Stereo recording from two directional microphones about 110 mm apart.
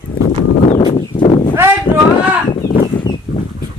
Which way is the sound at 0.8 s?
45° left (ahead or behind).